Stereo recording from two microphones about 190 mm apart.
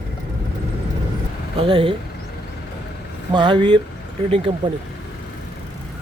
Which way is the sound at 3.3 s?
25° right (ahead or behind).